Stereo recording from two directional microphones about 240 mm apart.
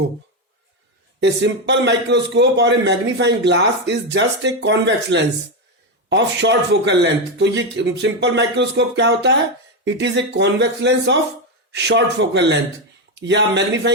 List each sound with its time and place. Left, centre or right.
1.2 s a man's voice: right